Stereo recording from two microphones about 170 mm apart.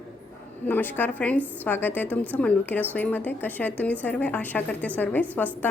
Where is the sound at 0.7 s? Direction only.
10° left (ahead or behind).